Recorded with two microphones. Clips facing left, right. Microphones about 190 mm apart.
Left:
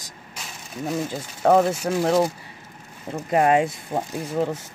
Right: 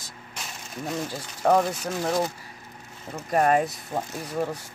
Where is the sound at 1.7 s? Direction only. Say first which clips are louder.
Left 6 dB; 30° left (ahead or behind).